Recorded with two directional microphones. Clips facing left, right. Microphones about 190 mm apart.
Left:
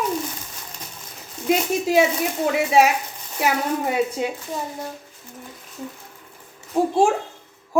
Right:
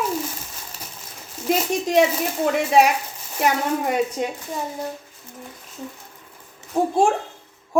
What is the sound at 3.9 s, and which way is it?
Speech, 10° left (ahead or behind).